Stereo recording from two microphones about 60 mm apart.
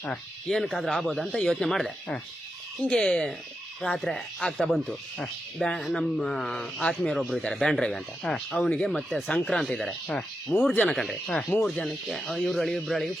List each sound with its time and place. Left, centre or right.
0.4 s speech: centre
2.8 s speech: centre
7.2 s speech: centre
9.3 s speech: centre
10.5 s speech: centre
10.8 s speech: centre